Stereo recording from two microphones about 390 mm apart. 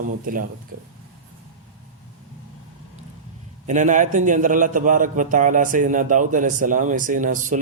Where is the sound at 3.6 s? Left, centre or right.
Centre.